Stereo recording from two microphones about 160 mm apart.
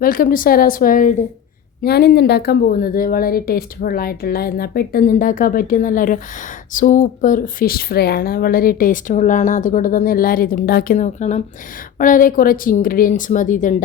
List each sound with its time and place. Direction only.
0.0 s speech: 60° left (ahead or behind)
1.8 s a woman's voice: 80° left; by 10.9 s 65° left (ahead or behind)
10.9 s speech: 50° left (ahead or behind)
11.9 s speech: 55° left (ahead or behind)